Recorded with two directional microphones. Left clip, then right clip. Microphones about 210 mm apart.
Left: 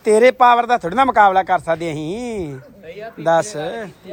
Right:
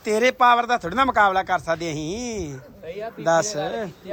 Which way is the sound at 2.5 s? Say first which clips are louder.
Even; 50° right (ahead or behind).